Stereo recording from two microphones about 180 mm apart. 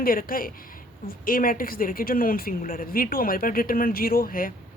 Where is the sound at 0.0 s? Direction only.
55° left (ahead or behind).